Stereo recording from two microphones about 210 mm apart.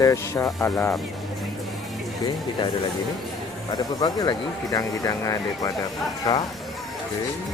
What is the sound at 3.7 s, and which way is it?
Speech, 20° left (ahead or behind).